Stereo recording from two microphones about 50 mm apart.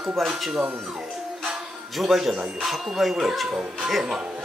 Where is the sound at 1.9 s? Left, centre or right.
Centre.